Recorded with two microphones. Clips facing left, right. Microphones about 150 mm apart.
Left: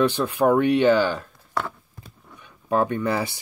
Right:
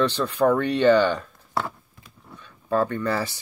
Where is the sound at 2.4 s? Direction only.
15° left (ahead or behind).